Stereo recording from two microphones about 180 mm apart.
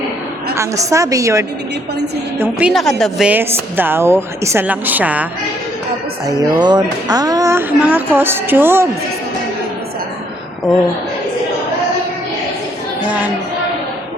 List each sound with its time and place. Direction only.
0.5 s speech: 15° right (ahead or behind)
2.4 s speech: 5° right (ahead or behind)
6.2 s speech: 20° right (ahead or behind)